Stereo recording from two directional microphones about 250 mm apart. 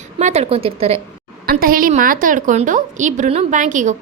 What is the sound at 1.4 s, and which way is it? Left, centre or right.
A woman's voice, right.